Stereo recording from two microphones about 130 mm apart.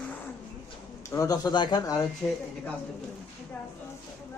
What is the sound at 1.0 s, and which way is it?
A man's voice, 25° left (ahead or behind).